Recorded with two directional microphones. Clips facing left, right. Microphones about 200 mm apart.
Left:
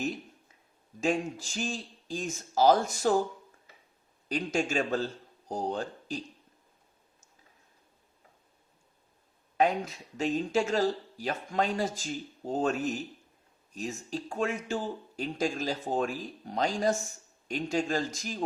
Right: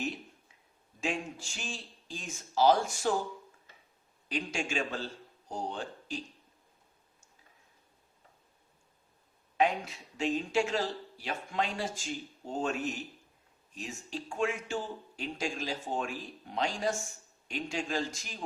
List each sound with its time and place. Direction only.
1.0 s speech: 40° left (ahead or behind)
4.3 s speech: 40° left (ahead or behind)
9.6 s speech: 40° left (ahead or behind)